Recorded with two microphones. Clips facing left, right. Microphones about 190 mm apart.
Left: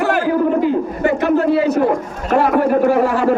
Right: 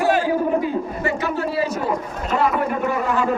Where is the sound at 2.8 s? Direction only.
75° left (ahead or behind).